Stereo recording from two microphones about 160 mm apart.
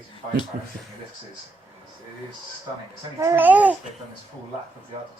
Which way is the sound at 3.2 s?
15° right (ahead or behind).